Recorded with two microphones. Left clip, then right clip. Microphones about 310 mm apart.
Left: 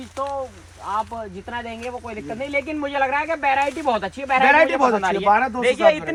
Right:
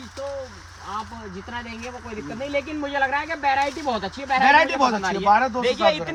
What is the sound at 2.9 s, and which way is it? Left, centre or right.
Speech, centre.